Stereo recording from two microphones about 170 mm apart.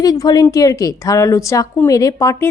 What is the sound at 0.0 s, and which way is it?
A woman's voice, 20° left (ahead or behind).